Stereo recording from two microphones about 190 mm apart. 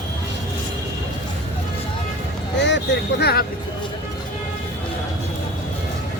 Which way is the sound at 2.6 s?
65° left (ahead or behind).